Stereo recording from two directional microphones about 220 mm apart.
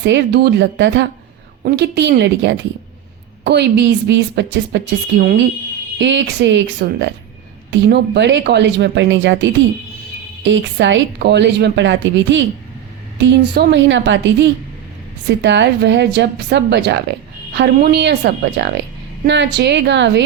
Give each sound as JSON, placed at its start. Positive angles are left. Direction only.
{"t": 0.0, "sound": "a woman's voice", "side_deg": -50}